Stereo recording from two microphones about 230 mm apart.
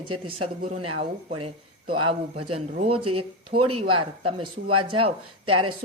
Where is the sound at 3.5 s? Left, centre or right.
Right.